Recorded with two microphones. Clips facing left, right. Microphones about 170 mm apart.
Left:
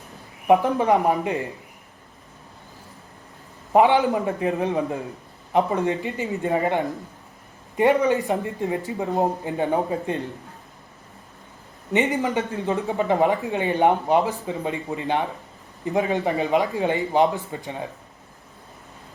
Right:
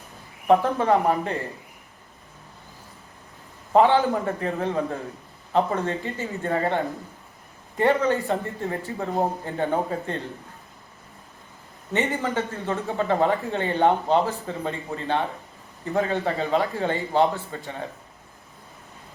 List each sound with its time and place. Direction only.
0.4 s a man's voice: 15° left (ahead or behind)
3.7 s a man's voice: 15° left (ahead or behind)
11.9 s a man's voice: 15° left (ahead or behind)